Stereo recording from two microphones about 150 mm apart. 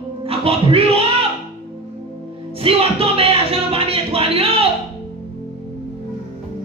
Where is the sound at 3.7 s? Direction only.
40° right (ahead or behind).